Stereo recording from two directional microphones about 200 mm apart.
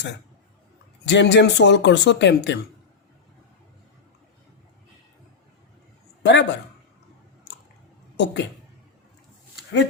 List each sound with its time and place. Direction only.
1.0 s speech: 60° left (ahead or behind)
6.2 s speech: 60° left (ahead or behind)
8.1 s a woman's voice: 60° left (ahead or behind)